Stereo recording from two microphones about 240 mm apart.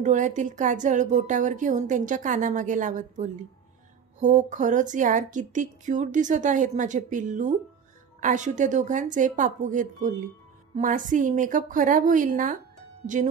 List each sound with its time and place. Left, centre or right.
0.0 s a woman's voice: right